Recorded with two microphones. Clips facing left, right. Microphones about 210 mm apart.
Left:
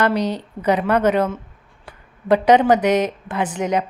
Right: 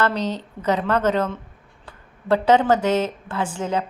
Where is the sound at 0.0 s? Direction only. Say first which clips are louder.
Left 3 dB; 10° left (ahead or behind).